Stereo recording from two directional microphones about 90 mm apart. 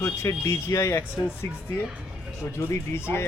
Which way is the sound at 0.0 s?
35° left (ahead or behind).